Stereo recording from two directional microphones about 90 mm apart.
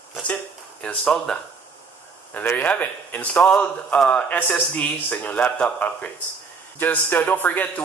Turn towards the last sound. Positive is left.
turn(degrees=20)  # may be behind; listen again after turning